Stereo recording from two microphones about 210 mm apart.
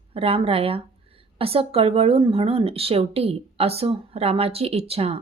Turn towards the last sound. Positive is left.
turn(degrees=-30)  # may be behind; listen again after turning